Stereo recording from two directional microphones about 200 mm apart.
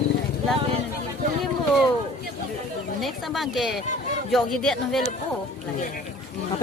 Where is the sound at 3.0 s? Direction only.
Centre (ahead or behind).